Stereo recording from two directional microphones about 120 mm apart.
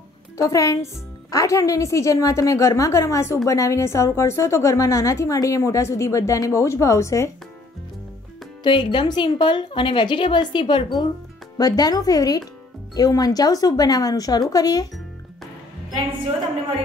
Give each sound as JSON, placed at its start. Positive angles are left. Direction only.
{"t": 0.4, "sound": "a woman's voice", "side_deg": 25}
{"t": 8.6, "sound": "a woman's voice", "side_deg": 40}